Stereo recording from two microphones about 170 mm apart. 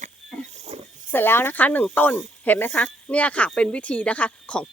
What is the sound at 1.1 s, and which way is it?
Speech, 15° left (ahead or behind).